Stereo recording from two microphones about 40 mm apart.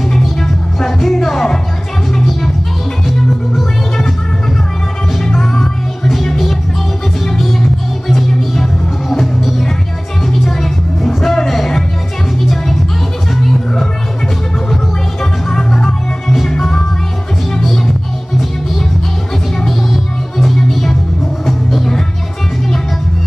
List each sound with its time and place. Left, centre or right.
0.1 s music: centre
5.2 s music: centre
6.0 s music: centre
8.1 s music: centre
13.4 s music: centre
15.4 s music: centre
19.9 s music: centre
20.5 s music: centre